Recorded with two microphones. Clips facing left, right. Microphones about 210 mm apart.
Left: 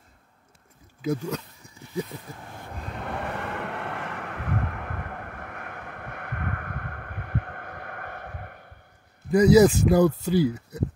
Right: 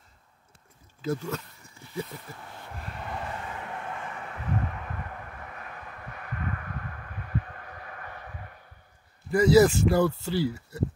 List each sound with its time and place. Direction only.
1.0 s a sound: 15° left (ahead or behind)
3.0 s vehicle: 65° left (ahead or behind)
9.3 s speech: 15° left (ahead or behind)